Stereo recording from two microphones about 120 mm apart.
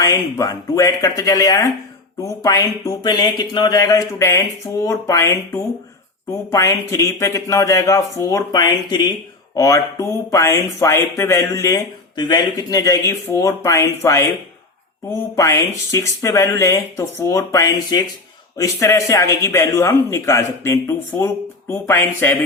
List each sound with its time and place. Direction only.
0.0 s speech: 30° left (ahead or behind)
12.1 s speech: 35° left (ahead or behind); by 22.4 s 20° left (ahead or behind)